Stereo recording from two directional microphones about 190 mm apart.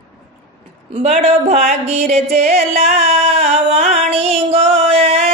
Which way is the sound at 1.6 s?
50° right (ahead or behind).